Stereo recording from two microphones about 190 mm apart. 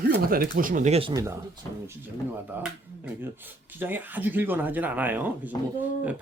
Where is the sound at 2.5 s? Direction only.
10° right (ahead or behind).